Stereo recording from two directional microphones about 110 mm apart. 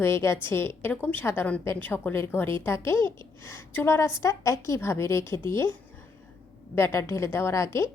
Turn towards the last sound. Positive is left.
turn(degrees=25)  # may be behind; listen again after turning